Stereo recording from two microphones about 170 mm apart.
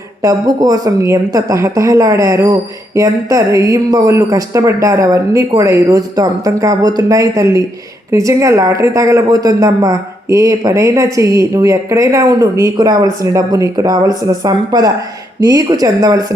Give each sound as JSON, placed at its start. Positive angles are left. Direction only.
{"t": 0.2, "sound": "speech", "side_deg": -20}